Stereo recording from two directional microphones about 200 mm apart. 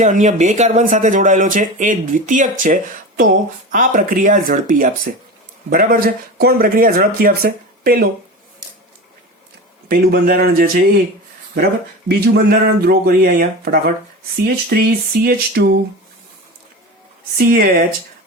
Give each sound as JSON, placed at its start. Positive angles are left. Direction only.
{"t": 0.0, "sound": "speech", "side_deg": -40}
{"t": 9.9, "sound": "speech", "side_deg": -45}
{"t": 12.0, "sound": "speech", "side_deg": -55}
{"t": 17.3, "sound": "speech", "side_deg": -50}